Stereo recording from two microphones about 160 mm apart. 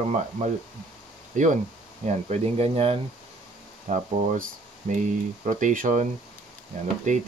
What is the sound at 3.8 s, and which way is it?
Speech, 50° right (ahead or behind).